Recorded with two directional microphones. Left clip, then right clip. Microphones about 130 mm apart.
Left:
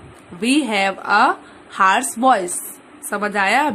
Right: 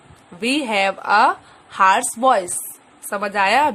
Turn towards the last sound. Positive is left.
turn(degrees=-25)  # may be behind; listen again after turning